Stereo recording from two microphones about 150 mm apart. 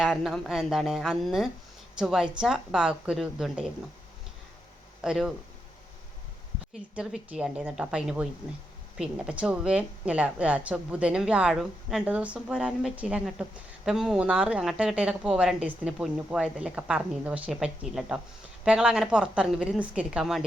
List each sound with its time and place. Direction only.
0.0 s a woman's voice: centre (ahead or behind)
5.0 s a woman's voice: 5° right (ahead or behind)
6.9 s a woman's voice: 5° right (ahead or behind)